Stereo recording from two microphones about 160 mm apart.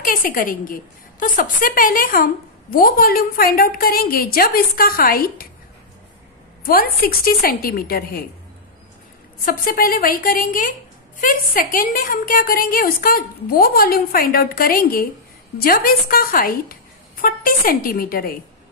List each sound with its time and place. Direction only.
0.0 s a woman's voice: 60° left (ahead or behind)
6.6 s a woman's voice: 65° left (ahead or behind)
9.4 s a woman's voice: 60° left (ahead or behind)